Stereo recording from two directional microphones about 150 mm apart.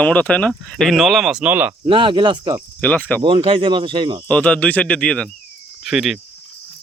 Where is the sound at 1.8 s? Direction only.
35° right (ahead or behind).